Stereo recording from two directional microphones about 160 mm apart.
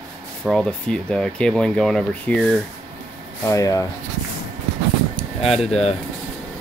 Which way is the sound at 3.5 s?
20° left (ahead or behind).